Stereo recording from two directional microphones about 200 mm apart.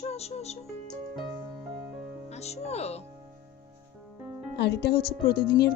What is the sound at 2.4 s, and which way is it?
Music, 30° left (ahead or behind).